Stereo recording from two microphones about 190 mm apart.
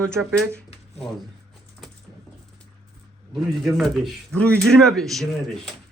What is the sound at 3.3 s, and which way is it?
Speech, centre (ahead or behind).